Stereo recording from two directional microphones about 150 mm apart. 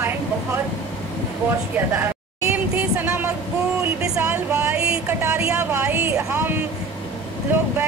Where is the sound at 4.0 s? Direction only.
15° right (ahead or behind).